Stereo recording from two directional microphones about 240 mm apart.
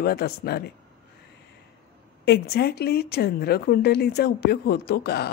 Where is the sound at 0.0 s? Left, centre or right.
Left.